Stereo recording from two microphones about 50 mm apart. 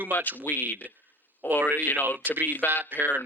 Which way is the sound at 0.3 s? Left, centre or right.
Left.